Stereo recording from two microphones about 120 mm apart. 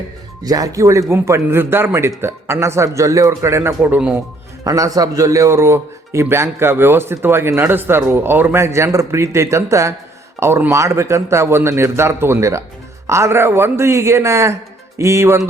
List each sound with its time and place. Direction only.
0.4 s a man's voice: 30° right (ahead or behind)
3.8 s speech: 10° right (ahead or behind)
4.6 s a man's voice: 30° right (ahead or behind)